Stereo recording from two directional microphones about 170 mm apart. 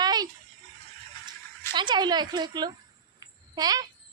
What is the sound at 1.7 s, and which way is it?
A woman's voice, 25° right (ahead or behind).